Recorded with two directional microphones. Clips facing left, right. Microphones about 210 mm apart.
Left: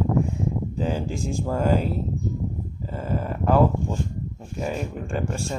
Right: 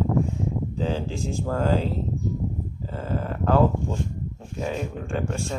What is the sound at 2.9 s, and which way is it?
Speech, 10° left (ahead or behind).